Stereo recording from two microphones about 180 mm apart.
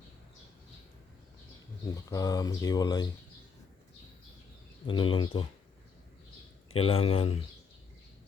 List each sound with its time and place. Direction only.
2.0 s speech: 20° left (ahead or behind)
4.9 s speech: 30° left (ahead or behind)
6.7 s speech: 30° left (ahead or behind)